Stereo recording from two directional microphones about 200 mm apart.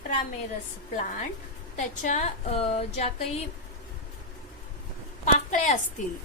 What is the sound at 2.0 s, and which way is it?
A woman's voice, 40° left (ahead or behind).